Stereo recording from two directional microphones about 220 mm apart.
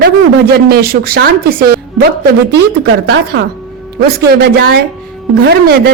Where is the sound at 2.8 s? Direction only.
45° right (ahead or behind).